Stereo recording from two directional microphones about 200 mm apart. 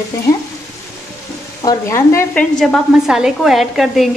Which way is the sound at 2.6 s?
Centre (ahead or behind).